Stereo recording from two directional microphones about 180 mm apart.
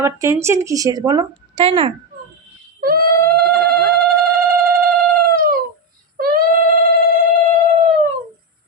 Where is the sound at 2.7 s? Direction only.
55° right (ahead or behind).